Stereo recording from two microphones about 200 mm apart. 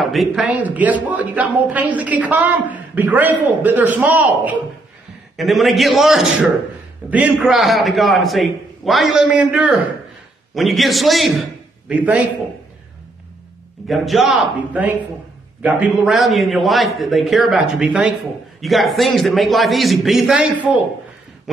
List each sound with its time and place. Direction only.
0.0 s a man's voice: centre (ahead or behind)
13.8 s a man's voice: centre (ahead or behind)